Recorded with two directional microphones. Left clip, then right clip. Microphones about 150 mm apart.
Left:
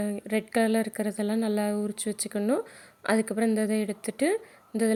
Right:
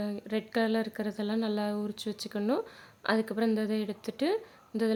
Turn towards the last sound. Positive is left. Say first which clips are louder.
# left 4 dB
turn(degrees=5)  # may be behind; listen again after turning